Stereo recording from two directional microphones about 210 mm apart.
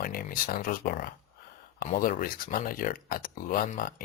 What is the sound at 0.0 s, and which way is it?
Speech, 45° left (ahead or behind).